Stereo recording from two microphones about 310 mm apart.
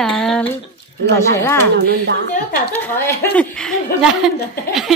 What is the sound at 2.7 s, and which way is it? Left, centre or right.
A woman's voice, centre.